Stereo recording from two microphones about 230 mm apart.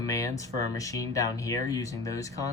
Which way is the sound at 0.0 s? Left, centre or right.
Centre.